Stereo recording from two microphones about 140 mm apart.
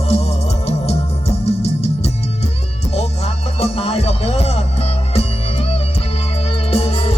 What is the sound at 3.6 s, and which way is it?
Music, 45° left (ahead or behind).